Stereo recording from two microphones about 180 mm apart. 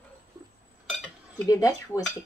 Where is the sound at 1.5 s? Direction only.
20° left (ahead or behind).